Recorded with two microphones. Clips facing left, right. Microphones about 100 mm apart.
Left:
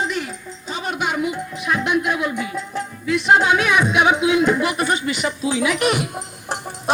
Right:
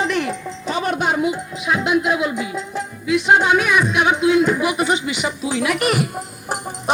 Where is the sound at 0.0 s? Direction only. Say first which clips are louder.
Right 4 dB; 70° right (ahead or behind).